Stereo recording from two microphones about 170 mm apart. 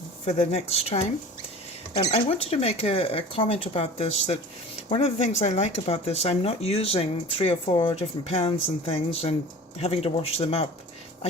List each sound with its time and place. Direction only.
0.3 s speech: 40° left (ahead or behind)
2.0 s speech: 35° left (ahead or behind)